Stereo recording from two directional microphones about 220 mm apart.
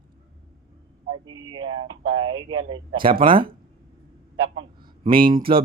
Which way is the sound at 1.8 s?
75° right (ahead or behind).